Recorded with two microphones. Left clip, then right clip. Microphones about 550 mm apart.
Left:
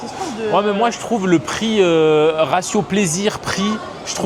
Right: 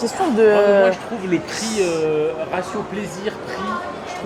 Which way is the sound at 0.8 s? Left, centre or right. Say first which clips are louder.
Even; left.